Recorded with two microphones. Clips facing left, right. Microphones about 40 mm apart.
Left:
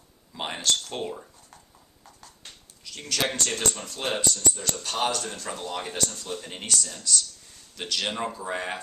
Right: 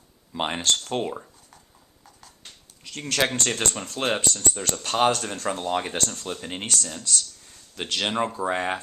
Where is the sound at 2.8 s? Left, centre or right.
Right.